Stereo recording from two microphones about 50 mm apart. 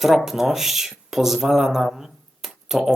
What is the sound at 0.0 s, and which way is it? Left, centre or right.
Speech, centre.